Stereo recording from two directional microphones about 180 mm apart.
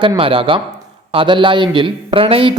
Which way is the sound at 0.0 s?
30° right (ahead or behind).